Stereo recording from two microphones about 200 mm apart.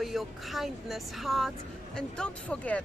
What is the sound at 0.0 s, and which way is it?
Speech, centre (ahead or behind).